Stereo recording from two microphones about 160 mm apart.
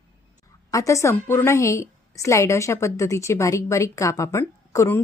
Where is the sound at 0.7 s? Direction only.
20° left (ahead or behind).